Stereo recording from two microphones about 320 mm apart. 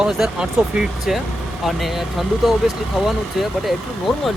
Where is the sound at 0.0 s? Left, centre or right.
Centre.